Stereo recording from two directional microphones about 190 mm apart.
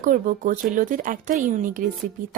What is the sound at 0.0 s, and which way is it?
Speech, 45° right (ahead or behind).